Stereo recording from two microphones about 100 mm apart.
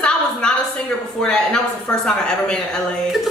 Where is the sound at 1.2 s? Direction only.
10° left (ahead or behind).